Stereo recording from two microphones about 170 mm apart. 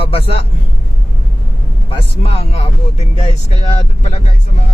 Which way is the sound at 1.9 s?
35° left (ahead or behind).